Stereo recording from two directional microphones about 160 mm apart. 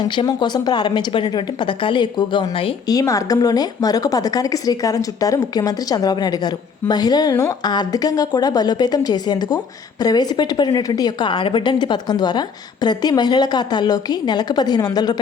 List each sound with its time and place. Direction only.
0.0 s speech: 30° left (ahead or behind)